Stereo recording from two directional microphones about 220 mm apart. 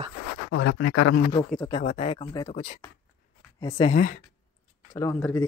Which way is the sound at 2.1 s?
20° left (ahead or behind).